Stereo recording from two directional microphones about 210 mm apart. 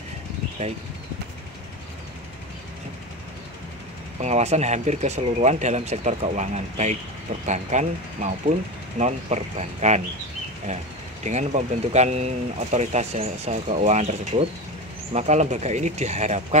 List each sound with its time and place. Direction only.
0.6 s speech: 30° right (ahead or behind)
4.2 s speech: 30° right (ahead or behind)
11.2 s speech: 35° right (ahead or behind)